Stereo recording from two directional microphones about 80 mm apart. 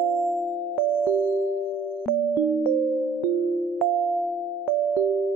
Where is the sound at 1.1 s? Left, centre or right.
Centre.